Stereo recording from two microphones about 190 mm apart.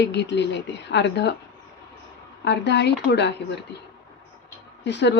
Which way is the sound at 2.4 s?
65° left (ahead or behind).